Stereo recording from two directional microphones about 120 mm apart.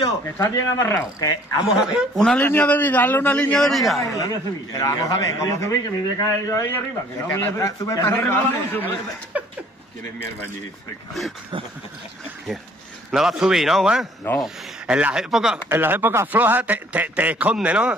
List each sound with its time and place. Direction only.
0.0 s a man's voice: 25° left (ahead or behind)
1.7 s a man's voice: 5° right (ahead or behind)
2.2 s a man's voice: 15° left (ahead or behind)
4.0 s a man's voice: 30° left (ahead or behind)
9.3 s chuckle: 10° right (ahead or behind)
13.1 s a man's voice: 5° right (ahead or behind)
15.7 s a man's voice: 15° right (ahead or behind)